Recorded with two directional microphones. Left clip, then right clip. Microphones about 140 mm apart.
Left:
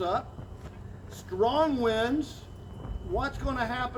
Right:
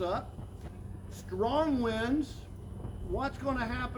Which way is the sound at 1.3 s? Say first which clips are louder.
Left 4 dB; 5° right (ahead or behind).